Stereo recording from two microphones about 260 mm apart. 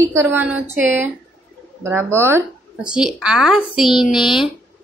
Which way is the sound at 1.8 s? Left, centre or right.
Centre.